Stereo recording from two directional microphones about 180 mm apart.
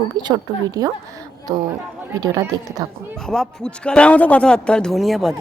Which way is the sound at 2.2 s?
20° right (ahead or behind).